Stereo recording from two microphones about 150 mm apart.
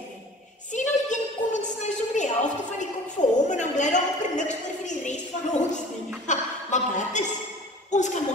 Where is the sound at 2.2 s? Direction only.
55° left (ahead or behind).